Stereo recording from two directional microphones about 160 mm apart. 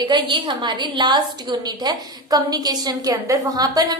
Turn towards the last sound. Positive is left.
turn(degrees=-25)  # may be behind; listen again after turning